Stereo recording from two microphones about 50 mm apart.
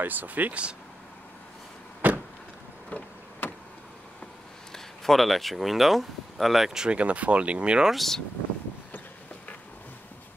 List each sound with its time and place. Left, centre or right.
0.0 s speech: right
2.0 s vehicle: right
2.9 s vehicle: left
4.7 s speech: centre
6.9 s speech: right
7.9 s speech: centre